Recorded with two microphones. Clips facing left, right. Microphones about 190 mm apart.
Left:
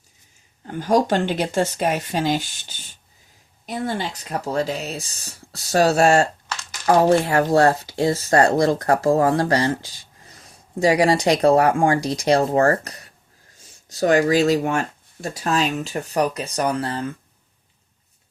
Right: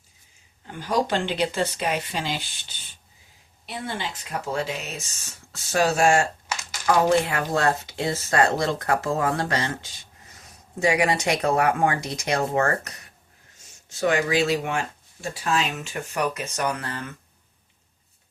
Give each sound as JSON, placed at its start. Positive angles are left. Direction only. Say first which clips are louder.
{"t": 0.7, "sound": "speech", "louder": "left 6 dB", "side_deg": 45}
{"t": 6.5, "sound": "a sound", "louder": "even", "side_deg": -10}
{"t": 6.8, "sound": "speech", "louder": "left 4 dB", "side_deg": 35}